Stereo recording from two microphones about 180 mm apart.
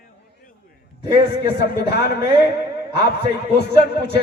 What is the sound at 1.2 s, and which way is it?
Speech, 65° left (ahead or behind).